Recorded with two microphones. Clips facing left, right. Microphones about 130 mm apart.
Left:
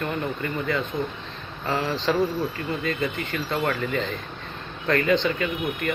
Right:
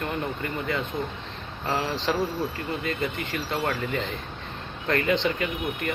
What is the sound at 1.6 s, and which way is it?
Speech, 25° right (ahead or behind).